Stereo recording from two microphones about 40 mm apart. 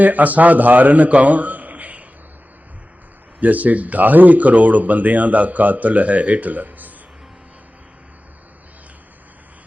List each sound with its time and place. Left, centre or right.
0.0 s a man's voice: right
3.4 s speech: right